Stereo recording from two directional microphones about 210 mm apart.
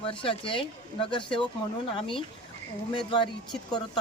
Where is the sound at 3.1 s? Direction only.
25° left (ahead or behind).